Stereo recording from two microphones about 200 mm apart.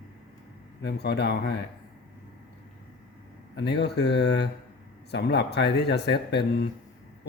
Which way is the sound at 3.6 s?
55° left (ahead or behind).